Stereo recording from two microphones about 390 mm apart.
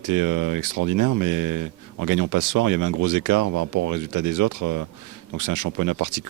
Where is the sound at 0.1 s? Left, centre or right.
Right.